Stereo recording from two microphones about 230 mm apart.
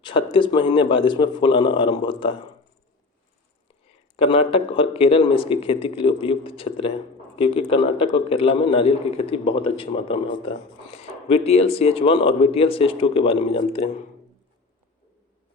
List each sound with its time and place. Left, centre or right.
0.0 s a man's voice: left
4.2 s a man's voice: left